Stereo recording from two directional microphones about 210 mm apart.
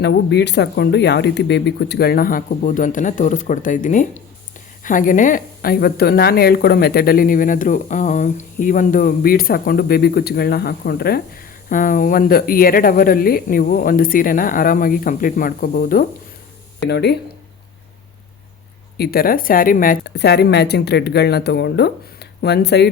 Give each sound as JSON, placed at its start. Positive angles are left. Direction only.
{"t": 0.0, "sound": "speech", "side_deg": 55}
{"t": 16.8, "sound": "speech", "side_deg": 50}
{"t": 18.9, "sound": "speech", "side_deg": 45}